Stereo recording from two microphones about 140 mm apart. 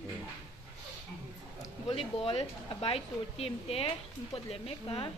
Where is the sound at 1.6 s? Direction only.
45° left (ahead or behind).